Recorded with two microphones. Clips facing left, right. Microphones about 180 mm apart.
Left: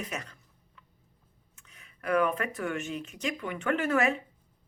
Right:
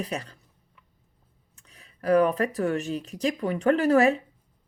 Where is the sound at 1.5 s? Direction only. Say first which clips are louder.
Right 3 dB; 35° right (ahead or behind).